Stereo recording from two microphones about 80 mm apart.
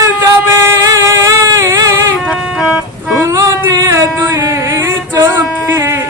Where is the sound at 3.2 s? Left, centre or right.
Right.